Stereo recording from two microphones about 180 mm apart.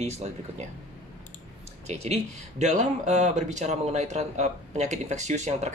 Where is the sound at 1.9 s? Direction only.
35° right (ahead or behind).